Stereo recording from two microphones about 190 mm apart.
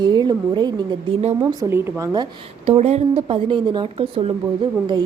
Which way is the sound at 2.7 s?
35° right (ahead or behind).